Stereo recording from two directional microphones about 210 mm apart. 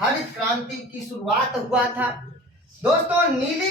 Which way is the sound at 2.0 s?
5° right (ahead or behind).